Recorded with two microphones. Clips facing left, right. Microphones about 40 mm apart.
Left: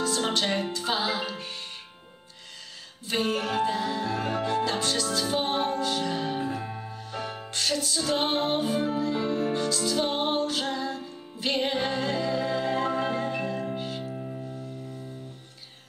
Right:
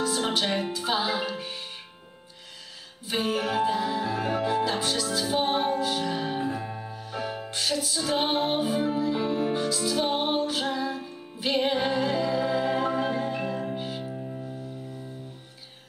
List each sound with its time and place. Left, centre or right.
0.0 s music: centre
3.1 s music: centre
7.0 s music: centre
14.1 s music: centre